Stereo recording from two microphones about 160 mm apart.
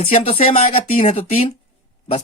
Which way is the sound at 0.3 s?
35° left (ahead or behind).